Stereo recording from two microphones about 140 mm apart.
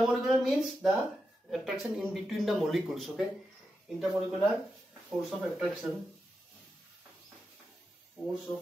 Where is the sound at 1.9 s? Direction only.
5° right (ahead or behind).